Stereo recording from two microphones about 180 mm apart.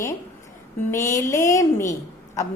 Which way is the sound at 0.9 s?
15° left (ahead or behind).